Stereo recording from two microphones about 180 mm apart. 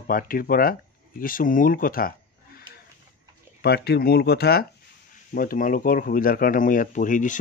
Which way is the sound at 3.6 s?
65° left (ahead or behind).